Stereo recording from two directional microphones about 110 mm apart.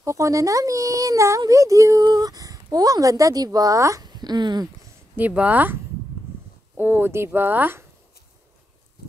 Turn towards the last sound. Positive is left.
turn(degrees=-20)  # may be behind; listen again after turning